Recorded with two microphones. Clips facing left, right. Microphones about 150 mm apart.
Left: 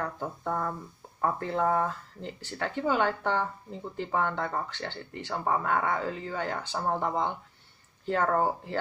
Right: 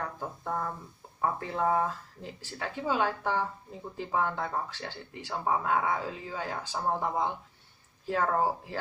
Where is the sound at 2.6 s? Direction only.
10° right (ahead or behind).